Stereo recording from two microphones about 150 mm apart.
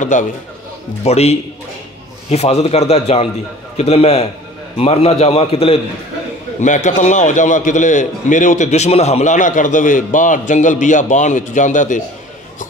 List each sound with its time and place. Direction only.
0.0 s a man's voice: 55° left (ahead or behind)
1.0 s a man's voice: 45° left (ahead or behind)
6.6 s a man's voice: 55° left (ahead or behind)